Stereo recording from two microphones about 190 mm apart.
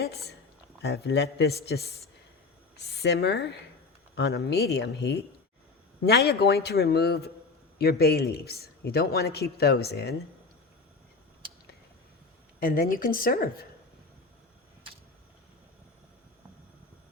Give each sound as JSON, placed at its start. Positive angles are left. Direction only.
{"t": 0.0, "sound": "a man's voice", "side_deg": 60}
{"t": 12.5, "sound": "a woman's voice", "side_deg": 50}